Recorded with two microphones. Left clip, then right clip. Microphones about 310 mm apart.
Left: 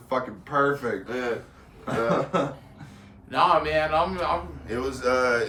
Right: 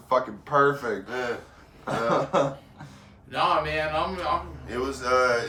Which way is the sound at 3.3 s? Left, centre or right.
Centre.